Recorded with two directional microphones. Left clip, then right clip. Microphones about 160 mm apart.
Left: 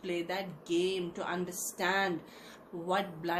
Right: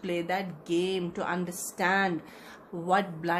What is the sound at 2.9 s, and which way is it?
Speech, 75° right (ahead or behind).